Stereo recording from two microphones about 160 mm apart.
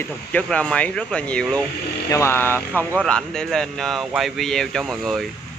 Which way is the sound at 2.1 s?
15° left (ahead or behind).